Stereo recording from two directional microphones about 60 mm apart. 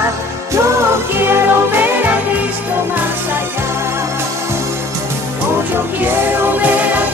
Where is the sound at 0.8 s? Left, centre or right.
Right.